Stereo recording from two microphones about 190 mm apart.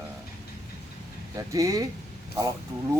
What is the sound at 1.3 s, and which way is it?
Speech, 15° right (ahead or behind).